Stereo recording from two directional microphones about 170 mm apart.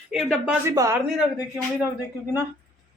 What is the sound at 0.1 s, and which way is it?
Speech, 5° right (ahead or behind).